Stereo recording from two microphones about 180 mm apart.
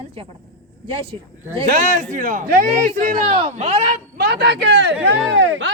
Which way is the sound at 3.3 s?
30° right (ahead or behind).